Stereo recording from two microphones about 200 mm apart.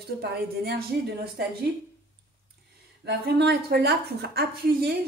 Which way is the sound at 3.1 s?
55° right (ahead or behind).